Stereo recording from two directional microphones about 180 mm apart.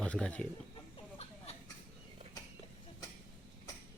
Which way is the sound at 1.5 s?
35° left (ahead or behind).